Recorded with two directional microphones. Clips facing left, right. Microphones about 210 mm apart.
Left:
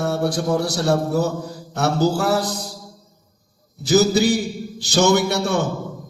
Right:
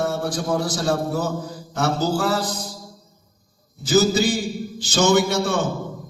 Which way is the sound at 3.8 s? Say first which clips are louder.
Left 2 dB; 65° left (ahead or behind).